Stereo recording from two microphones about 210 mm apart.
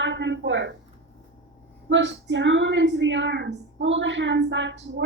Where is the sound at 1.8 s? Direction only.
60° right (ahead or behind).